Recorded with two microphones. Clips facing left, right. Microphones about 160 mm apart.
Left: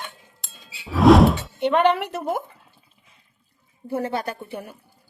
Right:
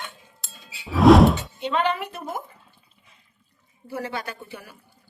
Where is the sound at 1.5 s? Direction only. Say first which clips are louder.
Left 6 dB; 65° left (ahead or behind).